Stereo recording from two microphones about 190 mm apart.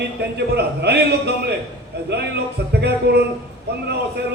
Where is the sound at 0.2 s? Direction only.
60° right (ahead or behind).